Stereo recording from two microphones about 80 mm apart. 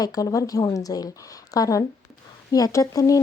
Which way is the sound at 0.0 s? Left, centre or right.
Left.